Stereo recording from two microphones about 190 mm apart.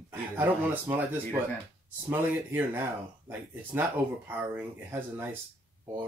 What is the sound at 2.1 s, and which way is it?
Speech, 10° right (ahead or behind).